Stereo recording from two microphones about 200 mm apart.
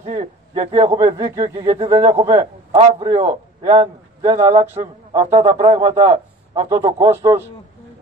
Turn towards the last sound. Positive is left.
turn(degrees=-10)  # may be behind; listen again after turning